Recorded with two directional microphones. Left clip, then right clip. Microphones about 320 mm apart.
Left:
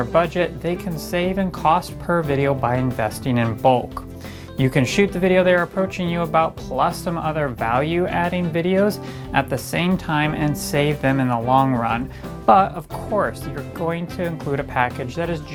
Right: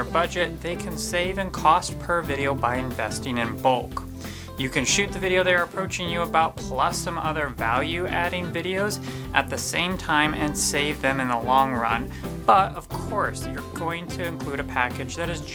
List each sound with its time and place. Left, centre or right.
0.1 s speech: left
13.7 s speech: left